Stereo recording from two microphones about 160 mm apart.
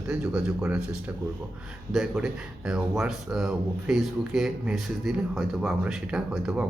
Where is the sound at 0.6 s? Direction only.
15° right (ahead or behind).